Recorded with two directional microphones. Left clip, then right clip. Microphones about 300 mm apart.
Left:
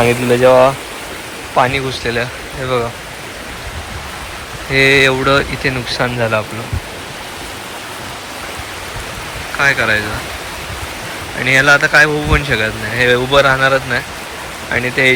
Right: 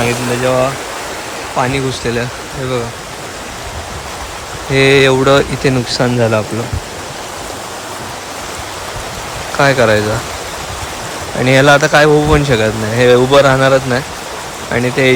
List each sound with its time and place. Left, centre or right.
0.0 s speech: centre
1.9 s a man's voice: centre
4.7 s a man's voice: centre
9.6 s a man's voice: centre
11.4 s a man's voice: centre